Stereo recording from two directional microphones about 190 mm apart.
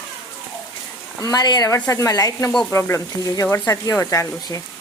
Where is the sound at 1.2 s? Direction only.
20° left (ahead or behind).